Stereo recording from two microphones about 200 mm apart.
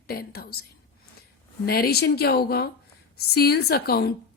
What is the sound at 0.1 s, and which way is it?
Speech, 50° left (ahead or behind).